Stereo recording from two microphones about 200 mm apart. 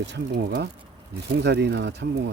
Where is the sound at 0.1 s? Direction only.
55° right (ahead or behind).